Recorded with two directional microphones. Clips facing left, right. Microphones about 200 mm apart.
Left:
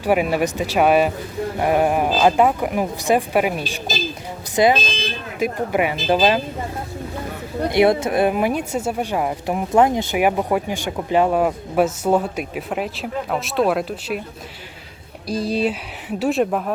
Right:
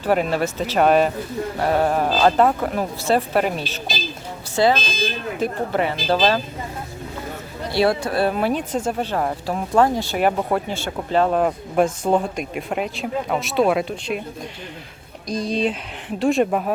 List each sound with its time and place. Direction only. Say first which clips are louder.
0.0 s speech: left 1 dB; 10° left (ahead or behind)
7.7 s speech: left 3 dB; 20° left (ahead or behind); by 14.2 s 5° left (ahead or behind)
15.3 s speech: left 1 dB; 5° left (ahead or behind)